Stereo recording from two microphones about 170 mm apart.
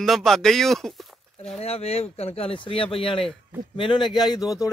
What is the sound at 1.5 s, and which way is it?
A man's voice, 35° left (ahead or behind).